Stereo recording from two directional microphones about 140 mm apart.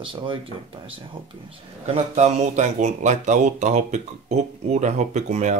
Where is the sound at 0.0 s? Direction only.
35° right (ahead or behind).